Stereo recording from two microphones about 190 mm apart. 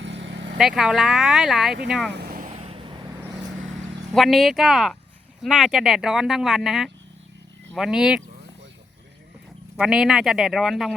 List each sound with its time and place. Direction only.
0.0 s vehicle: 75° right (ahead or behind)
0.6 s speech: 5° right (ahead or behind)
2.1 s vehicle: 50° right (ahead or behind); by 3.1 s 25° right (ahead or behind)
4.1 s speech: centre (ahead or behind)
9.7 s speech: 5° right (ahead or behind)